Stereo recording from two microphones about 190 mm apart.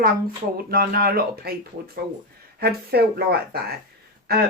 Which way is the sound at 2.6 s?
55° right (ahead or behind).